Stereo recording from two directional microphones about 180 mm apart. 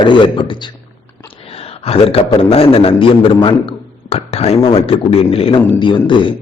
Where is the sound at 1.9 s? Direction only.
30° left (ahead or behind).